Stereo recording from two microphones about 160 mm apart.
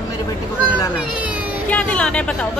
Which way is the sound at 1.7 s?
10° left (ahead or behind).